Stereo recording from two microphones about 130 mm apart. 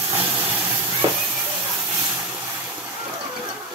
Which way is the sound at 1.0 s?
45° right (ahead or behind).